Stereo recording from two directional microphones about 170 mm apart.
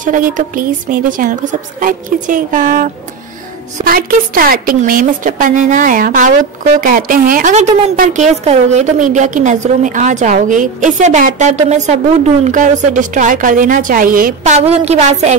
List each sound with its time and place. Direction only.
0.0 s a woman's voice: 50° right (ahead or behind)